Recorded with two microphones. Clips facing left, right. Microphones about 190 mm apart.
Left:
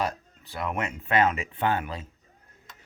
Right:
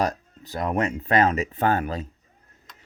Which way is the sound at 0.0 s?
40° right (ahead or behind).